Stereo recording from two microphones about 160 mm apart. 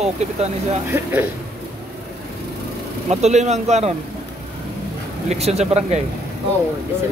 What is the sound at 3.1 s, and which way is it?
Speech, 45° right (ahead or behind).